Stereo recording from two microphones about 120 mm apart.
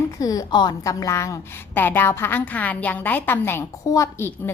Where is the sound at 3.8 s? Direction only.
30° left (ahead or behind).